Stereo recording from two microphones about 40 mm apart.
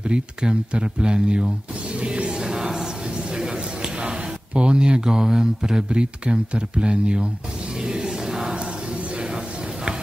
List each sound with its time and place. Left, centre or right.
0.1 s speech: right
2.0 s music: right
2.4 s a sound: centre
4.6 s speech: right
7.8 s music: right